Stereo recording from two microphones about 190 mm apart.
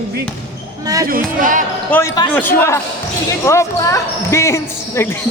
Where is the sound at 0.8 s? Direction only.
20° right (ahead or behind).